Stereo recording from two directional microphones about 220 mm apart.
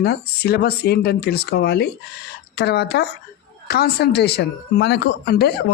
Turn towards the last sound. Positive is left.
turn(degrees=45)  # may be behind; listen again after turning